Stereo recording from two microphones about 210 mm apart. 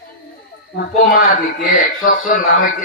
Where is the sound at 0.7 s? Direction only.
40° left (ahead or behind).